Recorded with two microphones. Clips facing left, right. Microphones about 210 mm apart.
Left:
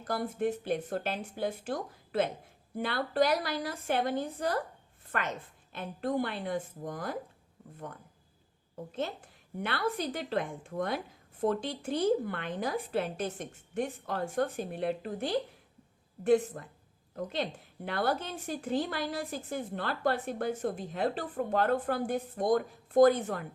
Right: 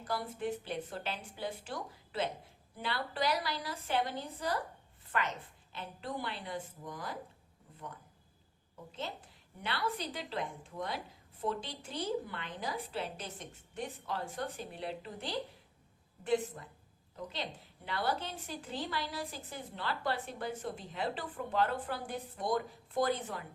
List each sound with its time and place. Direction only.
0.0 s a woman's voice: 50° left (ahead or behind)
5.7 s a woman's voice: 50° left (ahead or behind)
8.7 s a woman's voice: 50° left (ahead or behind)